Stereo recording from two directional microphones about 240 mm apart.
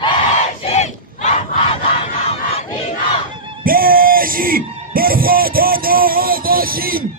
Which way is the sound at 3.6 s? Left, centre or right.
Right.